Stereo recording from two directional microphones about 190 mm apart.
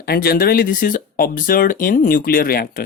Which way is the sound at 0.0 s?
55° left (ahead or behind).